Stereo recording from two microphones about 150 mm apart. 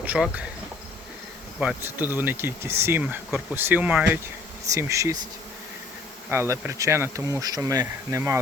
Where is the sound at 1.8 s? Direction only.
15° right (ahead or behind).